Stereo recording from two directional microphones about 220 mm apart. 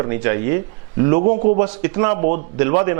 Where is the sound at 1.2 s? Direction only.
40° right (ahead or behind).